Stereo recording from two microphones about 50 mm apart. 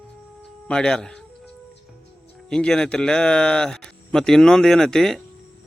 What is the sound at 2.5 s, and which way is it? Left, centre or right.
Speech, centre.